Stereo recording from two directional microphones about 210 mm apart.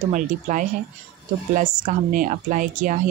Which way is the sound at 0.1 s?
40° right (ahead or behind).